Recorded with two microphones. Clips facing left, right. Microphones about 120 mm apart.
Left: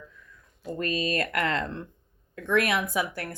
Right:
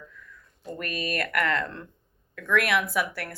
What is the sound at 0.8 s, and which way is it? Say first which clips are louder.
Speech: left 3 dB; 25° left (ahead or behind).